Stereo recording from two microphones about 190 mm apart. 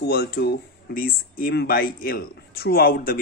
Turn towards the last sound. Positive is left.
turn(degrees=50)  # may be behind; listen again after turning